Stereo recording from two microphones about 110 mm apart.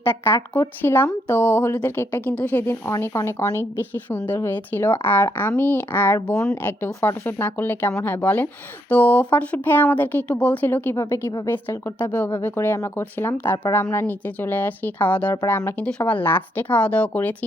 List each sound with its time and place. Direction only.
0.0 s speech: 20° left (ahead or behind)
11.0 s a woman's voice: 35° left (ahead or behind)
11.4 s speech: 20° left (ahead or behind)